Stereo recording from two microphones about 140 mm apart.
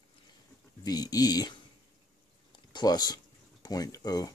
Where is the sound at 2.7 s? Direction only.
30° left (ahead or behind).